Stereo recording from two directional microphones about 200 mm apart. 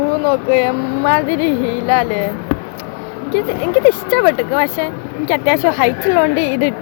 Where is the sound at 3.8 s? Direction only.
5° left (ahead or behind).